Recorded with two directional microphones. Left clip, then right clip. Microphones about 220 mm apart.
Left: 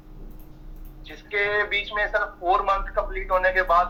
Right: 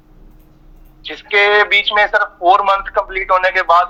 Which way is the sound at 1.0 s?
40° right (ahead or behind).